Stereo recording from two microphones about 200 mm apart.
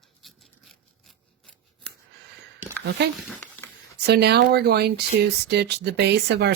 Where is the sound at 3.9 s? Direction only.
55° right (ahead or behind).